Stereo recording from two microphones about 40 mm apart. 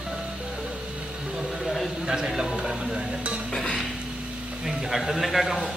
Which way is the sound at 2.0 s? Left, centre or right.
Centre.